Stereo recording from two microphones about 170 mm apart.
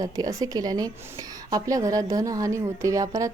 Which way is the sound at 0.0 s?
20° right (ahead or behind).